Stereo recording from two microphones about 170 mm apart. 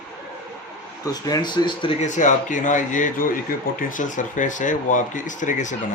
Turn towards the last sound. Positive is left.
turn(degrees=45)  # may be behind; listen again after turning